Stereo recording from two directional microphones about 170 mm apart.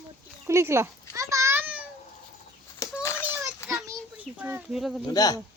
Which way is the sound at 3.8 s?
10° right (ahead or behind).